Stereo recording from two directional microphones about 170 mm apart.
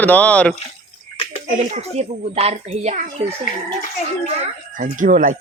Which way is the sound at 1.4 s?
45° right (ahead or behind).